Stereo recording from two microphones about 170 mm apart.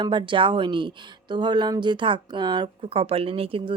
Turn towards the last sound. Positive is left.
turn(degrees=-35)  # may be behind; listen again after turning